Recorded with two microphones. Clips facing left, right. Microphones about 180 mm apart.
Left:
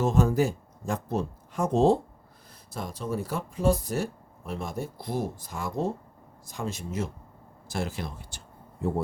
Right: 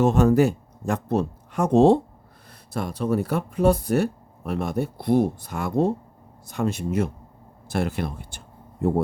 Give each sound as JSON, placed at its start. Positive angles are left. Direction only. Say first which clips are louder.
{"t": 0.0, "sound": "speech", "louder": "right 6 dB", "side_deg": -70}